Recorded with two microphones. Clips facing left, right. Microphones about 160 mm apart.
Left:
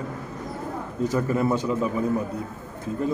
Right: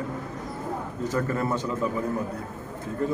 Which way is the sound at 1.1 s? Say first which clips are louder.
Left 3 dB; 10° left (ahead or behind).